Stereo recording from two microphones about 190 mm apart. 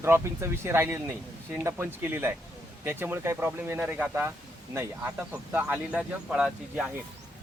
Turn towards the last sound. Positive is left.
turn(degrees=-5)  # may be behind; listen again after turning